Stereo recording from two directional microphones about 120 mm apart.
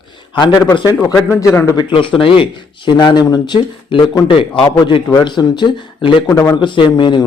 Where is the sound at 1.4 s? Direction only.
25° left (ahead or behind).